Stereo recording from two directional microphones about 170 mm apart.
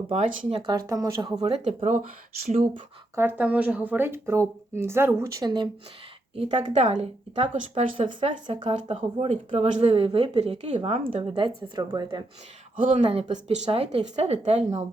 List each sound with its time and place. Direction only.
0.1 s speech: 35° right (ahead or behind)
0.7 s speech: 20° right (ahead or behind)
1.6 s speech: 45° right (ahead or behind)
3.2 s speech: 10° right (ahead or behind)
6.3 s speech: 35° right (ahead or behind)
8.0 s speech: 30° right (ahead or behind)
8.8 s speech: 40° right (ahead or behind); by 12.2 s 25° right (ahead or behind)
12.7 s speech: 50° right (ahead or behind)
13.0 s speech: 35° right (ahead or behind)